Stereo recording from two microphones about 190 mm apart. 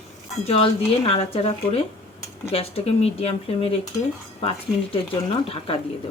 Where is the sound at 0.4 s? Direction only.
30° left (ahead or behind).